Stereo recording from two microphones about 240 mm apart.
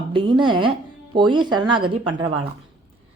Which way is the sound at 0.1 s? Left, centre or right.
Right.